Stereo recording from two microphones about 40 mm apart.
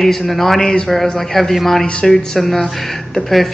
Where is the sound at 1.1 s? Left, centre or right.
Centre.